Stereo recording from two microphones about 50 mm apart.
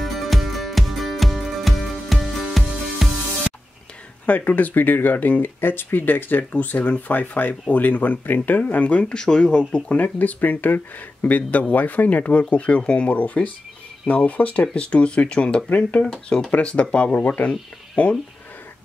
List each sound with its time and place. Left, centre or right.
0.0 s music: centre
4.3 s speech: left
9.1 s speech: centre